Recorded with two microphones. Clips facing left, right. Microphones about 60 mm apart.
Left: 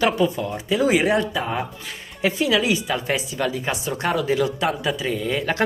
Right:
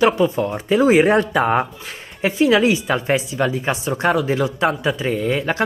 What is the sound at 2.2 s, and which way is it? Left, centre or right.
A woman's voice, right.